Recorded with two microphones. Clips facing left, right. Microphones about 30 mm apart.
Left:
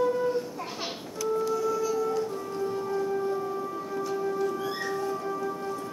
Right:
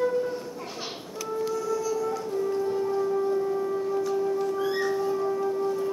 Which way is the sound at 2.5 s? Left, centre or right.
Centre.